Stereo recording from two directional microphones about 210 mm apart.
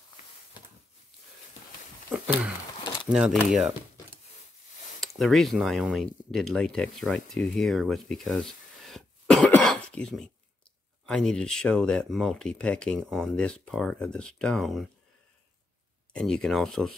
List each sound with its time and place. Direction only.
2.0 s a sound: 5° right (ahead or behind)
3.1 s speech: centre (ahead or behind)
5.0 s speech: centre (ahead or behind)
16.1 s speech: 5° left (ahead or behind)